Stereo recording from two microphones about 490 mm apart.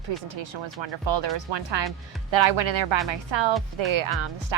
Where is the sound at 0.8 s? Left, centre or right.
Right.